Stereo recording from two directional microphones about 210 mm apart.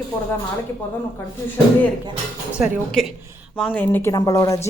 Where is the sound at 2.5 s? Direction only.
Centre (ahead or behind).